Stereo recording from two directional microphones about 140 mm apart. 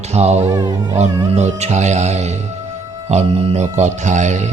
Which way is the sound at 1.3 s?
55° right (ahead or behind).